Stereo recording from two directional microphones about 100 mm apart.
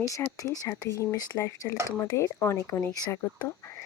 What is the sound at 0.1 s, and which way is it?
Speech, 30° left (ahead or behind).